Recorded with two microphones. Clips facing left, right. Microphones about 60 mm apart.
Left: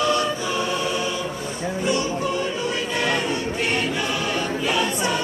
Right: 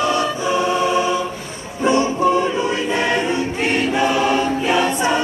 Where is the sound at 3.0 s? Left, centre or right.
Right.